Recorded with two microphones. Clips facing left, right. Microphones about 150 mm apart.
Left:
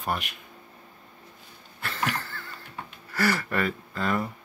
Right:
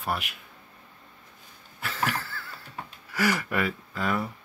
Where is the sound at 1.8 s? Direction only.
5° right (ahead or behind).